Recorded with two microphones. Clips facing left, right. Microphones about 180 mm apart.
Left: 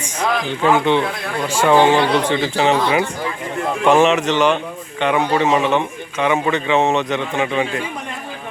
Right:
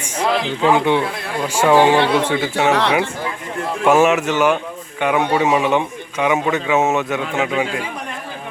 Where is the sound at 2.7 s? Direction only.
70° right (ahead or behind).